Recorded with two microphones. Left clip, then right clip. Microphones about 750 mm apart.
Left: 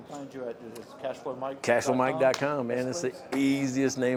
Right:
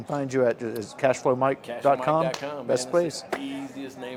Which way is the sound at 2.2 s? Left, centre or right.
Left.